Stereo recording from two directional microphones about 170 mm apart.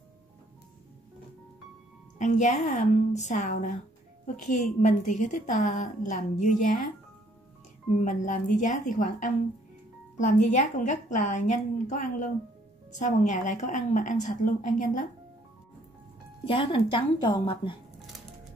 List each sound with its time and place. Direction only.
2.1 s a woman's voice: 45° left (ahead or behind)
7.9 s a woman's voice: 45° left (ahead or behind)
16.4 s speech: 30° left (ahead or behind)